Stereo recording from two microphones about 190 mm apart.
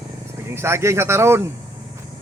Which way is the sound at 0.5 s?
15° right (ahead or behind).